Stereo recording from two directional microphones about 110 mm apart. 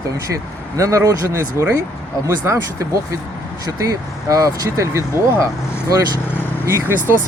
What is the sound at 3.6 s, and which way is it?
Speech, 30° right (ahead or behind).